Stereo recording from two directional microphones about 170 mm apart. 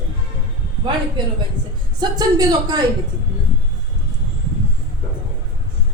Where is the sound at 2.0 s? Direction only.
25° right (ahead or behind).